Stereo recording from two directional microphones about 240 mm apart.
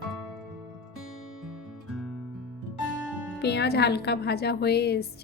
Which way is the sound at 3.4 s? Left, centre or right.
Left.